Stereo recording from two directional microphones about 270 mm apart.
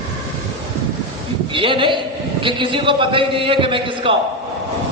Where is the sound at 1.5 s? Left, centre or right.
Centre.